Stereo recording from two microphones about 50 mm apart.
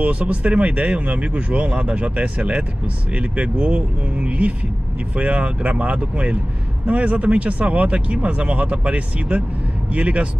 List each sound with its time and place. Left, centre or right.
0.0 s speech: right